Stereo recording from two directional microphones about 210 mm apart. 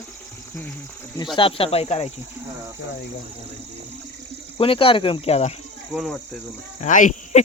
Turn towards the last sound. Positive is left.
turn(degrees=35)  # may be behind; listen again after turning